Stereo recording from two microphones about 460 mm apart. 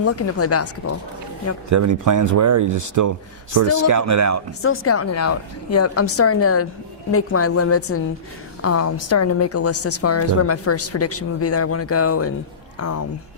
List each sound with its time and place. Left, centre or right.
0.0 s a woman's voice: left
1.7 s speech: right
4.6 s a woman's voice: left